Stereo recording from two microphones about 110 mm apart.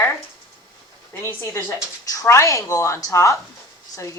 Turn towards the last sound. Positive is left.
turn(degrees=30)  # may be behind; listen again after turning